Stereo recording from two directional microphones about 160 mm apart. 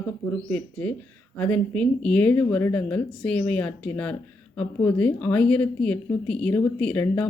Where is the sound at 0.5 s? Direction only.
10° left (ahead or behind).